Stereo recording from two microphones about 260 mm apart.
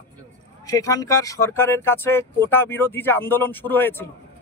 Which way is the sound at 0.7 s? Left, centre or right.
Centre.